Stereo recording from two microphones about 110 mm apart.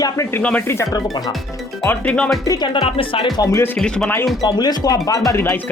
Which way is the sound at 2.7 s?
55° left (ahead or behind).